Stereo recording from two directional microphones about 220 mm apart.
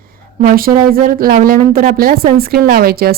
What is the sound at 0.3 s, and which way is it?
Speech, 40° right (ahead or behind).